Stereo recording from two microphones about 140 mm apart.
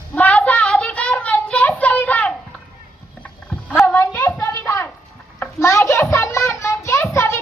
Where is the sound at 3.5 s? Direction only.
5° left (ahead or behind).